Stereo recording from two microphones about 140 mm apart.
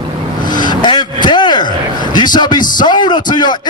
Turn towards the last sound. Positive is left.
turn(degrees=30)  # may be behind; listen again after turning